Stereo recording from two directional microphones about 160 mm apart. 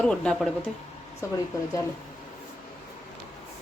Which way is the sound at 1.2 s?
15° left (ahead or behind).